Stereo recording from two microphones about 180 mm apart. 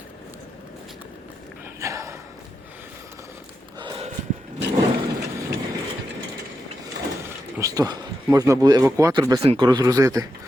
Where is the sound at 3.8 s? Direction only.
25° right (ahead or behind).